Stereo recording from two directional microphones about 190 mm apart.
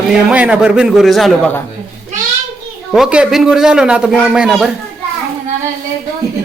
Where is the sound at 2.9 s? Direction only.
5° right (ahead or behind).